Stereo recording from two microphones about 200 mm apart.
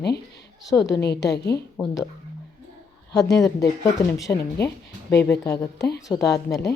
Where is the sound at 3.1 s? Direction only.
15° left (ahead or behind).